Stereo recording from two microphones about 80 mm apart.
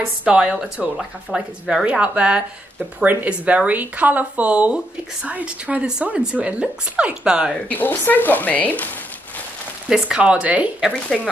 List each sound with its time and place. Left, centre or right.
0.2 s speech: centre
7.5 s speech: left
9.8 s speech: centre
11.1 s speech: centre